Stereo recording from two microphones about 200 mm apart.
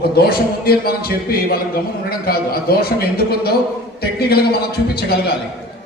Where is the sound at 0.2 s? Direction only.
50° left (ahead or behind).